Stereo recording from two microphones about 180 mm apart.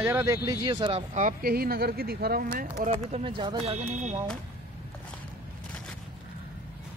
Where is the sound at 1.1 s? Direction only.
50° right (ahead or behind).